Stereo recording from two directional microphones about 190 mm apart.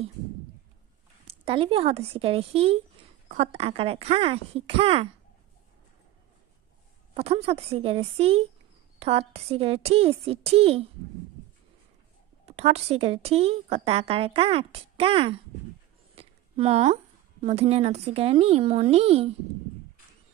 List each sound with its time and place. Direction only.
1.2 s a woman's voice: 30° right (ahead or behind)
7.2 s a woman's voice: 30° right (ahead or behind)
12.4 s a woman's voice: 35° right (ahead or behind)